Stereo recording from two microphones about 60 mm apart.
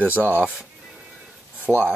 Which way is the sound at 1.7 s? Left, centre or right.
Centre.